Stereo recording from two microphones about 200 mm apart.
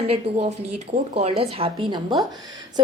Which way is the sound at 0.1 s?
35° right (ahead or behind).